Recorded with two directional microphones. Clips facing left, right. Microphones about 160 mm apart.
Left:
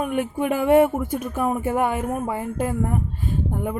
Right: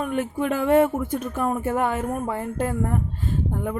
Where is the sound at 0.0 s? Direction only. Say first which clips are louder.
Left 1 dB; 15° left (ahead or behind).